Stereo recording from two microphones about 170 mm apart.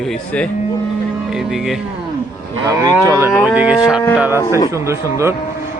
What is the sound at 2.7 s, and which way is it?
Cattle, 20° right (ahead or behind).